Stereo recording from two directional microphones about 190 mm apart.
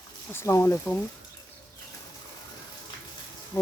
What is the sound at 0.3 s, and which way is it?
Speech, 15° left (ahead or behind).